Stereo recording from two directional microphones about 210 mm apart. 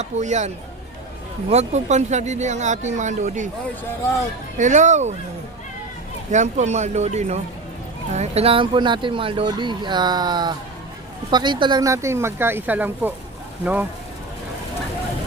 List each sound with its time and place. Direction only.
0.0 s speech: 35° right (ahead or behind)
4.5 s speech: 35° right (ahead or behind)
6.3 s speech: 35° right (ahead or behind); by 13.1 s 10° right (ahead or behind)